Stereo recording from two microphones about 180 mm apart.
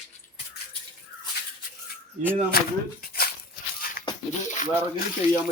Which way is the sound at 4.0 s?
50° left (ahead or behind).